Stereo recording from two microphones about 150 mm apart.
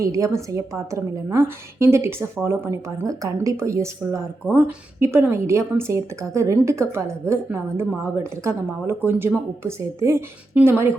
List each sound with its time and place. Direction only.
0.0 s a woman's voice: 20° right (ahead or behind)